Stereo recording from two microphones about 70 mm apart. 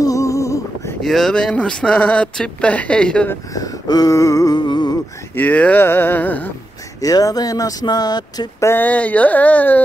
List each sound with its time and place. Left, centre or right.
0.0 s a sound: left
1.0 s speech: centre
3.5 s a sound: left
4.6 s music: left
5.3 s speech: left
7.0 s speech: left
8.7 s speech: left